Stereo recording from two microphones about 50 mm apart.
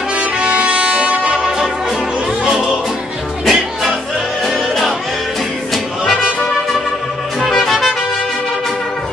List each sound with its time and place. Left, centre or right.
0.2 s music: right
2.4 s music: centre
7.3 s music: centre